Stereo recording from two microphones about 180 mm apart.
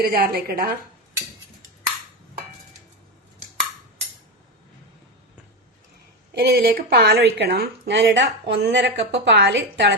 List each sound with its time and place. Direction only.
0.0 s a woman's voice: 55° right (ahead or behind)
6.3 s a woman's voice: 60° right (ahead or behind)